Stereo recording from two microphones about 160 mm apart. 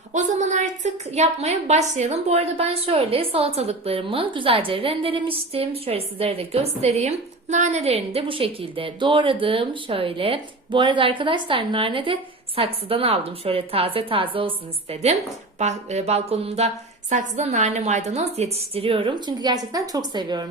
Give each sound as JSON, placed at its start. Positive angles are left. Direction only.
{"t": 0.1, "sound": "a woman's voice", "side_deg": -50}
{"t": 15.5, "sound": "a woman's voice", "side_deg": -45}